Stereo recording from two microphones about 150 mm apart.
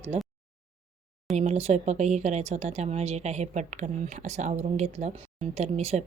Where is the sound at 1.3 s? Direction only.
45° right (ahead or behind).